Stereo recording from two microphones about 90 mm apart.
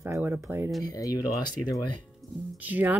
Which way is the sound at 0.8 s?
45° left (ahead or behind).